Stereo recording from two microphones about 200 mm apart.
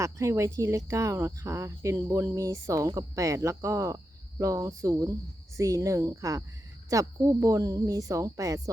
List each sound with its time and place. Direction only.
0.0 s speech: 15° right (ahead or behind)